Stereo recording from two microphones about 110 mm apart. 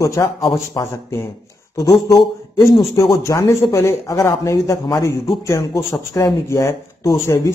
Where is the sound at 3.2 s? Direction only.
25° left (ahead or behind).